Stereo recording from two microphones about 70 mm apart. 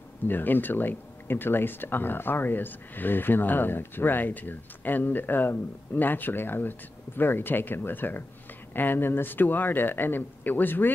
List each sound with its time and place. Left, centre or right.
0.3 s speech: left